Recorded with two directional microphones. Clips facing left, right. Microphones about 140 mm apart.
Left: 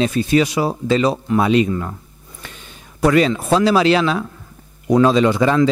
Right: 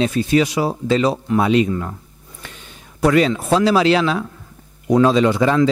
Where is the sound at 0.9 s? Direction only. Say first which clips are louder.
Even; 15° left (ahead or behind).